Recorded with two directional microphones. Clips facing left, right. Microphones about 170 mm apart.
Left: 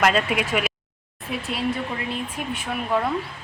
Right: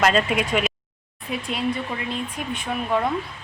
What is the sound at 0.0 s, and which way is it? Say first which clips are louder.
Speech: right 1 dB; 5° left (ahead or behind).